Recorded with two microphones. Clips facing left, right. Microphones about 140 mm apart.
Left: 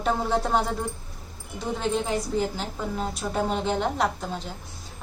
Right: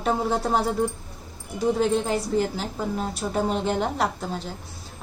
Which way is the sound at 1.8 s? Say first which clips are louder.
Left 1 dB; 5° right (ahead or behind).